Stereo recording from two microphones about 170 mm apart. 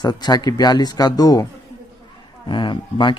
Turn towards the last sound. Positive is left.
turn(degrees=30)  # may be behind; listen again after turning